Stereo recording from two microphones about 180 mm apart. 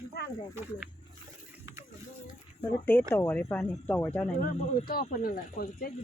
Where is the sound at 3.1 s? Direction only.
10° left (ahead or behind).